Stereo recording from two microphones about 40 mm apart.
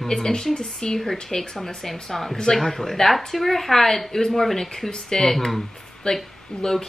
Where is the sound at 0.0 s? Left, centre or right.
Centre.